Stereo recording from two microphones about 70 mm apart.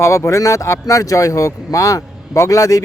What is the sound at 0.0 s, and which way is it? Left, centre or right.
Speech, left.